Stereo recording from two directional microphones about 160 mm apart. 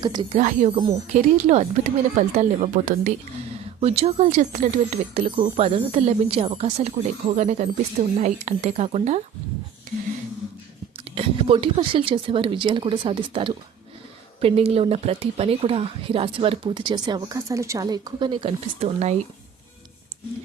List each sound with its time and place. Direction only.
0.0 s speech: 30° right (ahead or behind)
0.3 s speech: 45° right (ahead or behind)
3.8 s speech: 35° right (ahead or behind)
11.1 s speech: 35° right (ahead or behind)